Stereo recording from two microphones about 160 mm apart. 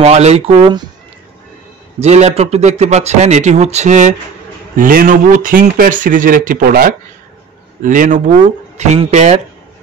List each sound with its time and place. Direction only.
0.0 s speech: 45° right (ahead or behind)
2.0 s a man's voice: 45° right (ahead or behind)
4.7 s a man's voice: 60° right (ahead or behind)